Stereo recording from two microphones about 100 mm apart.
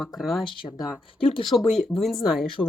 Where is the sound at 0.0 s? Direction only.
Centre (ahead or behind).